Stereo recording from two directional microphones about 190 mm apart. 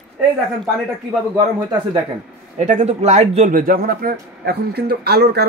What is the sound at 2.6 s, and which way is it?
Speech, 35° right (ahead or behind).